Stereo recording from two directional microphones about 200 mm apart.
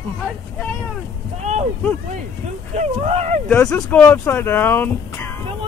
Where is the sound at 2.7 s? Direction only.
35° right (ahead or behind).